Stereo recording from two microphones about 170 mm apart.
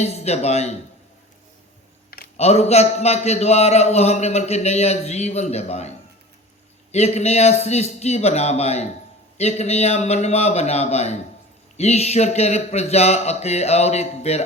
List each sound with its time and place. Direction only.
0.0 s a man's voice: 40° left (ahead or behind)
2.4 s a man's voice: 40° left (ahead or behind)
6.9 s a man's voice: 40° left (ahead or behind)